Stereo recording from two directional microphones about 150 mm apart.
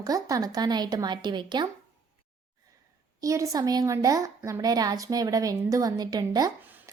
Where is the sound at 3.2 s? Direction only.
20° right (ahead or behind).